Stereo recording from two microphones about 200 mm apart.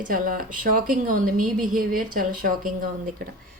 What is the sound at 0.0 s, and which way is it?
A woman's voice, 45° right (ahead or behind).